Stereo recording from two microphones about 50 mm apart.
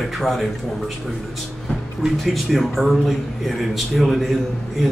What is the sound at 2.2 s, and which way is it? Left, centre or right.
A man's voice, centre.